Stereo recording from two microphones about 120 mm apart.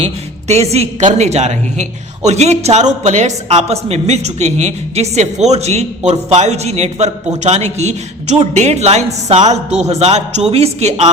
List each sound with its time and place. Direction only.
0.0 s a woman's voice: 65° right (ahead or behind)